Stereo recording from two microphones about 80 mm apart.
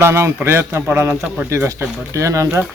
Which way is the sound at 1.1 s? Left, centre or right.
Centre.